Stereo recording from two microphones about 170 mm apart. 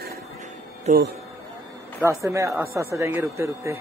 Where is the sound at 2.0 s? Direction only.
15° right (ahead or behind).